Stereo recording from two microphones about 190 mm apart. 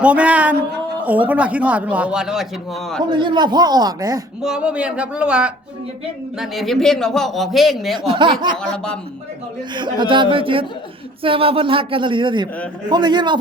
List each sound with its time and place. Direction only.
0.0 s speech: 5° right (ahead or behind)
3.1 s speech: 25° right (ahead or behind)
4.4 s a man's voice: 5° right (ahead or behind)
7.9 s speech: 25° right (ahead or behind)
9.7 s speech: 25° right (ahead or behind)